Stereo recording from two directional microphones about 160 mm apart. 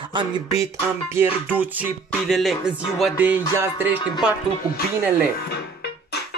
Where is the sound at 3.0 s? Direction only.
10° right (ahead or behind).